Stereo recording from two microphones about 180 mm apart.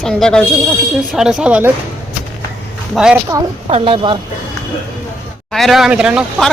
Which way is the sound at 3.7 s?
30° right (ahead or behind).